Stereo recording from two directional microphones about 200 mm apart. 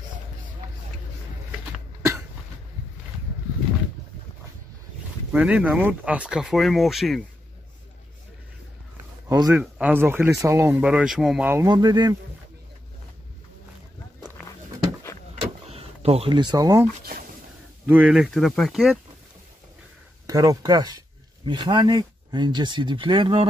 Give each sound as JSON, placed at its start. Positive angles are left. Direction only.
{"t": 5.3, "sound": "speech", "side_deg": -5}
{"t": 9.3, "sound": "speech", "side_deg": -20}
{"t": 9.6, "sound": "speech", "side_deg": -5}
{"t": 15.7, "sound": "speech", "side_deg": -30}
{"t": 17.8, "sound": "speech", "side_deg": -5}
{"t": 20.2, "sound": "speech", "side_deg": -20}